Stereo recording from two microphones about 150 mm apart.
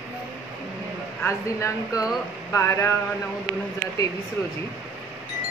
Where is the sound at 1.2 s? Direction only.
20° left (ahead or behind).